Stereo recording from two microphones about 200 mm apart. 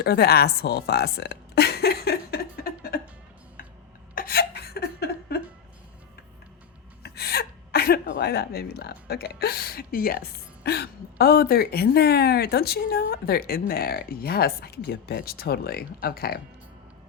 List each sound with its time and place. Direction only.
0.0 s speech: 50° left (ahead or behind)
4.1 s a sound: 45° left (ahead or behind)
7.0 s speech: 55° left (ahead or behind)